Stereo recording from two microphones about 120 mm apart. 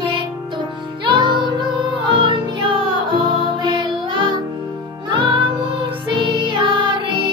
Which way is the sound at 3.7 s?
40° right (ahead or behind).